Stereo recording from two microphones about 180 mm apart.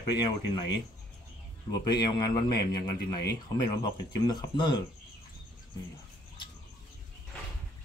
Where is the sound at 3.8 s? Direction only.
25° left (ahead or behind).